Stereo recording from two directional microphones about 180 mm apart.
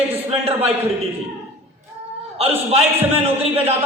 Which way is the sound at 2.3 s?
35° right (ahead or behind).